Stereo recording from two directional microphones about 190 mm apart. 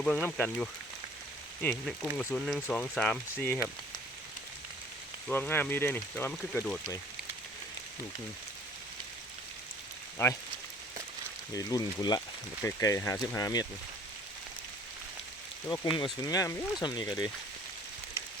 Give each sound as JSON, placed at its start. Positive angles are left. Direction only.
{"t": 0.3, "sound": "speech", "side_deg": 5}
{"t": 5.3, "sound": "speech", "side_deg": 10}
{"t": 10.2, "sound": "speech", "side_deg": 15}
{"t": 11.5, "sound": "speech", "side_deg": 20}
{"t": 15.6, "sound": "speech", "side_deg": 20}